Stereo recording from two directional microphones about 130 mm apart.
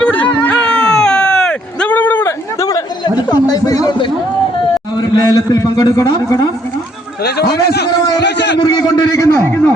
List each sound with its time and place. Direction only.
0.0 s a sound: 10° left (ahead or behind)
2.6 s chatter: 30° left (ahead or behind)
4.9 s a man's voice: 30° left (ahead or behind)
7.5 s a man's voice: 30° left (ahead or behind)